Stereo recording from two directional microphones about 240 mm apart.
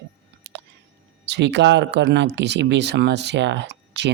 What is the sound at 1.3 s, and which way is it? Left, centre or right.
Speech, right.